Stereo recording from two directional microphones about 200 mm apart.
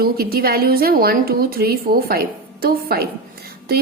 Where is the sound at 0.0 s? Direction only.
50° right (ahead or behind).